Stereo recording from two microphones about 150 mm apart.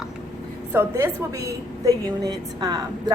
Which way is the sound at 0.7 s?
15° right (ahead or behind).